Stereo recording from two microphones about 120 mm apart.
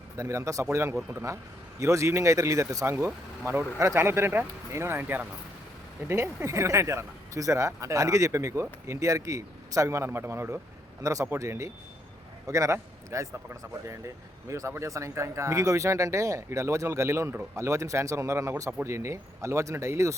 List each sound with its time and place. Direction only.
0.2 s speech: 25° right (ahead or behind)